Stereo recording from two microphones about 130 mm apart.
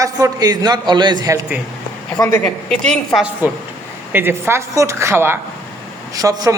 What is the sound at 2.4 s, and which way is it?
Speech, 5° left (ahead or behind).